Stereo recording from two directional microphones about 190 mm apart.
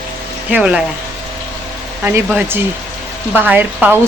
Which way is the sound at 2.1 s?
10° right (ahead or behind).